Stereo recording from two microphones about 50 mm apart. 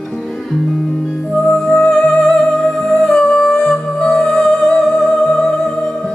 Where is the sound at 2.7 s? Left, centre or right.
Centre.